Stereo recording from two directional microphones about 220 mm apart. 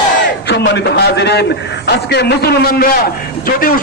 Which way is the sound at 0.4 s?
55° left (ahead or behind).